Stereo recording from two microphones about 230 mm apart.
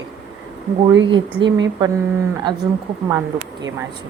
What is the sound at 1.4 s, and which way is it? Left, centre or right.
Speech, right.